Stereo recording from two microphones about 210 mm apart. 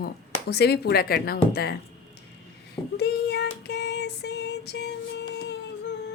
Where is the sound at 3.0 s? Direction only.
50° left (ahead or behind).